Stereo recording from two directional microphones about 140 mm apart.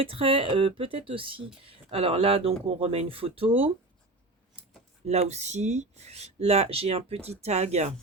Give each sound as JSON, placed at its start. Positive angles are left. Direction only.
{"t": 0.0, "sound": "speech", "side_deg": -40}
{"t": 5.0, "sound": "speech", "side_deg": -50}